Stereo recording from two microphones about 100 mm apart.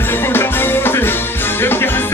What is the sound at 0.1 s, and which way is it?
Music, 20° left (ahead or behind).